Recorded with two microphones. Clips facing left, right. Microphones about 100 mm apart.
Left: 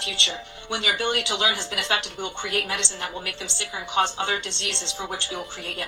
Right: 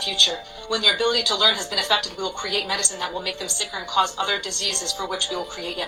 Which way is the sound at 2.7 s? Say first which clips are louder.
Right 3 dB; 15° right (ahead or behind).